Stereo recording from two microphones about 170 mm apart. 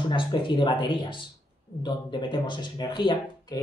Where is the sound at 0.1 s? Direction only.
30° left (ahead or behind).